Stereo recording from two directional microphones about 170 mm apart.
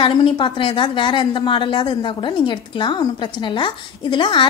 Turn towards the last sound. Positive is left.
turn(degrees=30)  # may be behind; listen again after turning